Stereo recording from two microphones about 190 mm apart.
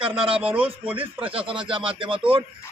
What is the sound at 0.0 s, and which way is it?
Speech, 30° right (ahead or behind).